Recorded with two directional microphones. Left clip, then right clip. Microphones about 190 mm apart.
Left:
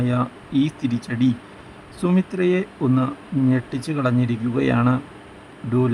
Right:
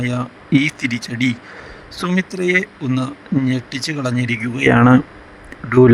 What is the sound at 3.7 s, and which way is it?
Speech, 45° right (ahead or behind).